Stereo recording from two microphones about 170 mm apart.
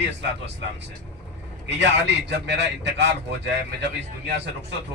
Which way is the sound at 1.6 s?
90° right.